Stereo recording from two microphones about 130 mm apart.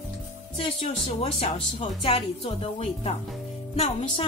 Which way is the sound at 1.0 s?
55° left (ahead or behind).